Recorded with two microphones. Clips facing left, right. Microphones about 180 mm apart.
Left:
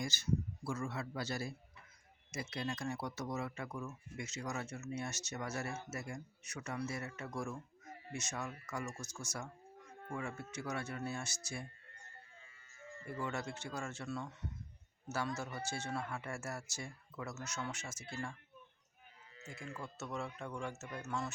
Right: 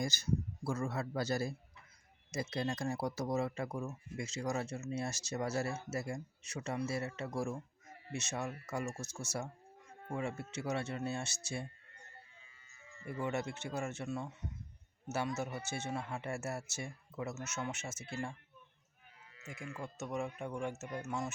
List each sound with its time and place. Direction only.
0.0 s a man's voice: 40° right (ahead or behind)
12.4 s music: 45° left (ahead or behind)
13.1 s a man's voice: 20° right (ahead or behind)
19.4 s speech: 35° left (ahead or behind)
19.8 s speech: 15° right (ahead or behind)